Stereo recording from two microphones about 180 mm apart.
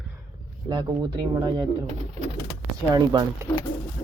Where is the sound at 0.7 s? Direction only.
25° right (ahead or behind).